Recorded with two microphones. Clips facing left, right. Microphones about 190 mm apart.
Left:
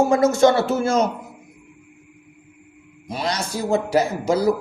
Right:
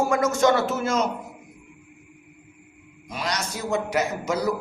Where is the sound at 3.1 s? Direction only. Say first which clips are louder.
Left 4 dB; 30° left (ahead or behind).